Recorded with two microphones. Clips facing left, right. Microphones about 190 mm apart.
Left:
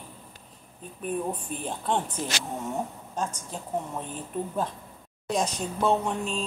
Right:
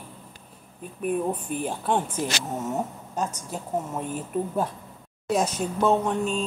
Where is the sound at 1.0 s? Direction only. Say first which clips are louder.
Right 4 dB; 10° right (ahead or behind).